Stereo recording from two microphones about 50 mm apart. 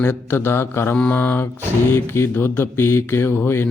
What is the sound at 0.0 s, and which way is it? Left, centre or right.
Mantra, left.